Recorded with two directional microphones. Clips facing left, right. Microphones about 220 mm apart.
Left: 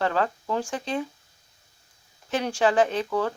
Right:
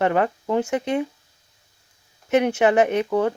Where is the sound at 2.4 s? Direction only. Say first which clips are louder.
Right 3 dB; 20° right (ahead or behind).